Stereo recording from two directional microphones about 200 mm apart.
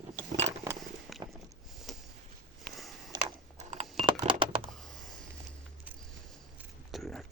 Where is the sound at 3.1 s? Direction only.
25° right (ahead or behind).